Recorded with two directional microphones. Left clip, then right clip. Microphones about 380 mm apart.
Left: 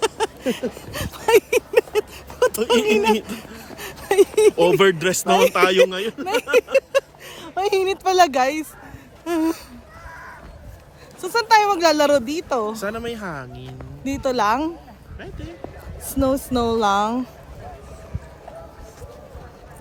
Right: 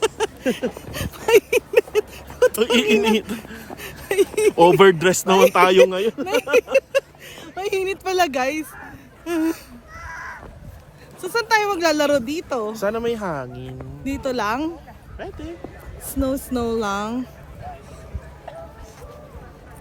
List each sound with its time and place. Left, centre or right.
0.2 s a sound: centre
2.8 s speech: centre
3.3 s a sound: centre
4.5 s speech: centre
6.2 s speech: centre
6.7 s a sound: centre
9.2 s speech: centre
10.0 s crow: right
11.2 s speech: centre
12.7 s speech: centre
14.0 s speech: centre
15.2 s speech: centre
16.0 s speech: centre